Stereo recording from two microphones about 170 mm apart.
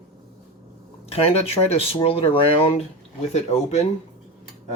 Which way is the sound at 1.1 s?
35° left (ahead or behind).